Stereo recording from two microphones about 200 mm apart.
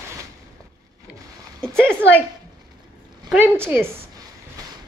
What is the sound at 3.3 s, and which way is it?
Speech, 10° right (ahead or behind).